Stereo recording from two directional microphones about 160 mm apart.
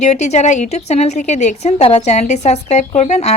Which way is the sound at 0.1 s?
45° left (ahead or behind).